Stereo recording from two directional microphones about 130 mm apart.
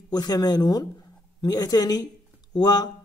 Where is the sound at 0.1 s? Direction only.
30° left (ahead or behind).